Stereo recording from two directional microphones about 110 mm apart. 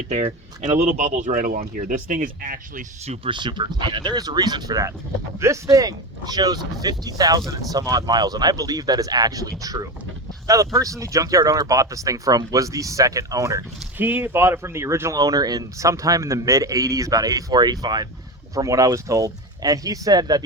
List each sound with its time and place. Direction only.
0.1 s speech: 80° right
3.2 s speech: 45° right (ahead or behind)
14.0 s speech: 20° right (ahead or behind)
15.2 s speech: 35° right (ahead or behind)